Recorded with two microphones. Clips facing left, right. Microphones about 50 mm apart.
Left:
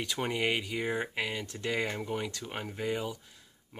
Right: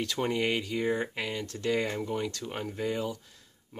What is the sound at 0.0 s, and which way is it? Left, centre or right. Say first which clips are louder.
Speech: right 2 dB; centre.